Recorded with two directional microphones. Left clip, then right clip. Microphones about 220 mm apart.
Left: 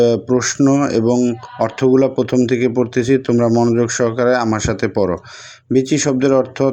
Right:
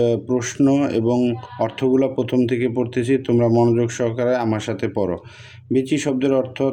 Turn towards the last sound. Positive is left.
turn(degrees=-5)  # may be behind; listen again after turning